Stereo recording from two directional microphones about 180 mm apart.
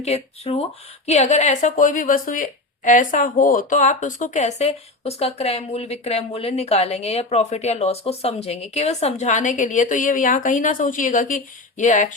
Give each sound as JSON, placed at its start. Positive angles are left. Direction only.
{"t": 0.0, "sound": "speech", "side_deg": 35}